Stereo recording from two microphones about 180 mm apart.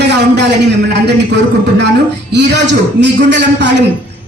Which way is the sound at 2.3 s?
75° right (ahead or behind).